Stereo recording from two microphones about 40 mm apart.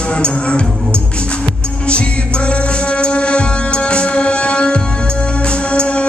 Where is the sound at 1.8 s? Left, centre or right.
Left.